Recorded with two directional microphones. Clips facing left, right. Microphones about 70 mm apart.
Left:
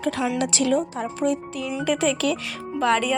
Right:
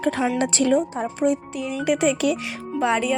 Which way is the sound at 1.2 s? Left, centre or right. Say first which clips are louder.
Right 2 dB; right.